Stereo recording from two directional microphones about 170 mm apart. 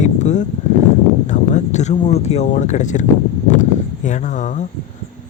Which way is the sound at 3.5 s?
45° left (ahead or behind).